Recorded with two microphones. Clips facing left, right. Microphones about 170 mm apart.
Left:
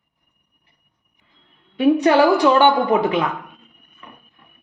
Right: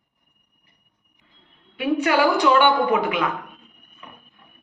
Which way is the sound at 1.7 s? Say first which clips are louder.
Left 6 dB; 35° left (ahead or behind).